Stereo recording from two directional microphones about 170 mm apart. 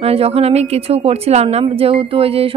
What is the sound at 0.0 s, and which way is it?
Speech, 35° right (ahead or behind).